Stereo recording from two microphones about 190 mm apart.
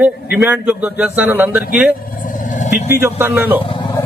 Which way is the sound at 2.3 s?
45° left (ahead or behind).